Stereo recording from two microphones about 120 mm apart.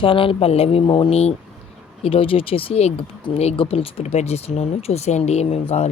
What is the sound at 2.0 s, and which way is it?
Speech, 50° left (ahead or behind).